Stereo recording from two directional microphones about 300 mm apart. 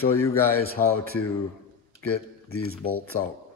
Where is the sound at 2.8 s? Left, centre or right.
Left.